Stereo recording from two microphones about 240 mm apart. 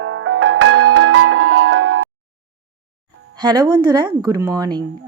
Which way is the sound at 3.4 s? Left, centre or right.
Centre.